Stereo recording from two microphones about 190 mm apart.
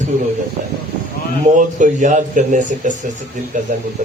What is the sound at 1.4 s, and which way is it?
Speech, 40° right (ahead or behind).